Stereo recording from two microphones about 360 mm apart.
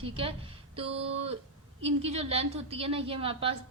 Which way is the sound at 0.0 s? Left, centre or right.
Centre.